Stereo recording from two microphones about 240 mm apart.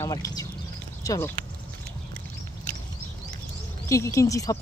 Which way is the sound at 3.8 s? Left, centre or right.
Centre.